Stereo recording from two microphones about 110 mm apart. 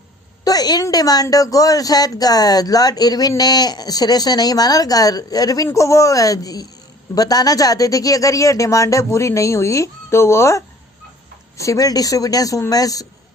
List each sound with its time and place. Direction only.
0.4 s a woman's voice: 35° left (ahead or behind)
11.6 s a woman's voice: 30° left (ahead or behind)